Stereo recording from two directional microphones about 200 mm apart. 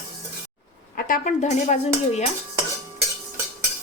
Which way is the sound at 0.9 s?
40° left (ahead or behind).